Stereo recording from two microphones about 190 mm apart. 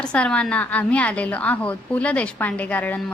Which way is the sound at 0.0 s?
5° left (ahead or behind).